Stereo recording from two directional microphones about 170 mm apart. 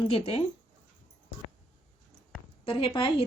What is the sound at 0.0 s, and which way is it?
Speech, 35° left (ahead or behind).